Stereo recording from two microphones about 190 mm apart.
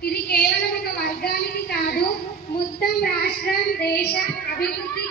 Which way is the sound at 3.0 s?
55° left (ahead or behind).